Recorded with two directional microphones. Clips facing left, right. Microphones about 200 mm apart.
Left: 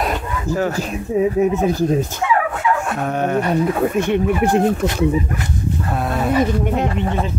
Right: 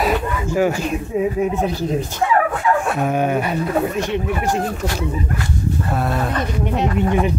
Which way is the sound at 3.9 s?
55° left (ahead or behind).